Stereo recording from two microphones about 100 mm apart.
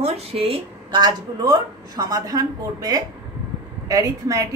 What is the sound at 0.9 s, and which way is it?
A woman's voice, 45° right (ahead or behind).